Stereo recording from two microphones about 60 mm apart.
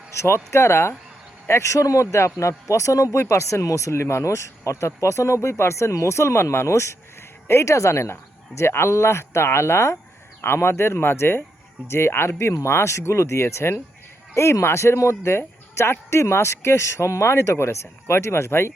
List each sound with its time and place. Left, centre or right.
0.1 s a man's voice: left